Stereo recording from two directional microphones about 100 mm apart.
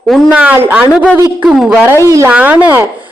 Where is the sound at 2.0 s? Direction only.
30° right (ahead or behind).